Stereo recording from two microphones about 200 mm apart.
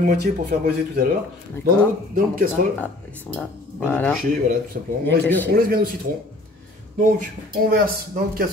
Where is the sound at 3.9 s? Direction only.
10° left (ahead or behind).